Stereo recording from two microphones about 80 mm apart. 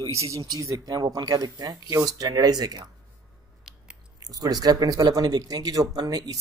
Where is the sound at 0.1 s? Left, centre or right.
Right.